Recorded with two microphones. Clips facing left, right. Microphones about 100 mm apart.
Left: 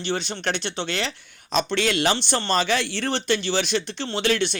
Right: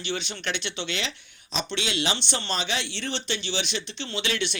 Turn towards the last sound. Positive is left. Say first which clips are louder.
# left 6 dB
turn(degrees=40)  # may be behind; listen again after turning